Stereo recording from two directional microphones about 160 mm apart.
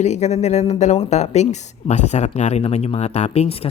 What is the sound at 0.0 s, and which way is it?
Speech, 45° left (ahead or behind).